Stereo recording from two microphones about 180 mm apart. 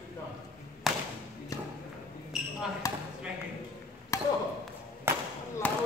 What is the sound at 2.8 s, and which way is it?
Basketball bounce, 15° left (ahead or behind).